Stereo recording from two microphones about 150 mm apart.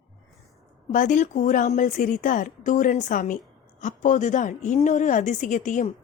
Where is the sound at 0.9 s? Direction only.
60° left (ahead or behind).